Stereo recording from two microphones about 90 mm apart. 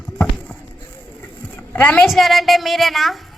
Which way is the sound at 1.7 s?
15° left (ahead or behind).